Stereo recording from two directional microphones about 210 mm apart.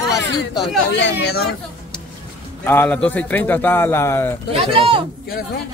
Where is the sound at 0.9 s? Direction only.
55° left (ahead or behind).